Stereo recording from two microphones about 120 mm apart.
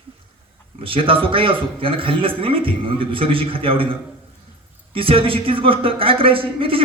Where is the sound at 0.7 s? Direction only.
50° right (ahead or behind).